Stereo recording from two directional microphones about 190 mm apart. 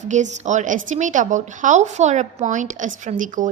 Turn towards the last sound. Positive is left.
turn(degrees=-45)  # may be behind; listen again after turning